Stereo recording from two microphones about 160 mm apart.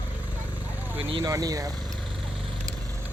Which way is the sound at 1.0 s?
35° right (ahead or behind).